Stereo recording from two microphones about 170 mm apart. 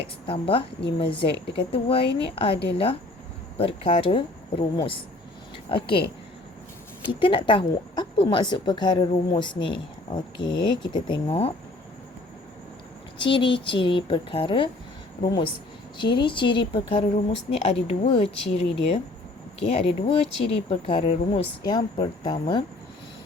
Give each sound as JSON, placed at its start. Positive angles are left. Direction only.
{"t": 0.3, "sound": "speech", "side_deg": 30}
{"t": 3.6, "sound": "speech", "side_deg": 35}
{"t": 7.1, "sound": "a woman's voice", "side_deg": 30}
{"t": 13.1, "sound": "a woman's voice", "side_deg": 30}
{"t": 21.6, "sound": "a woman's voice", "side_deg": 25}